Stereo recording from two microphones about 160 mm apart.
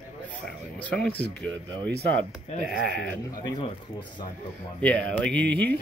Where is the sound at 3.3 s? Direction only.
30° left (ahead or behind).